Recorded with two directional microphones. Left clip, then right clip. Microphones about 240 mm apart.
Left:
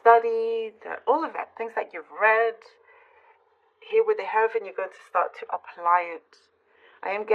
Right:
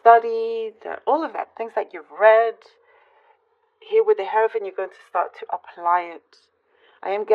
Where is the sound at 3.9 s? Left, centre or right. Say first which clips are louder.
Right 4 dB; right.